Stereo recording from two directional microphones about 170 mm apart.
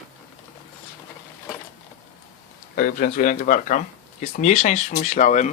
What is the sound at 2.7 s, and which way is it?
Speech, 55° left (ahead or behind).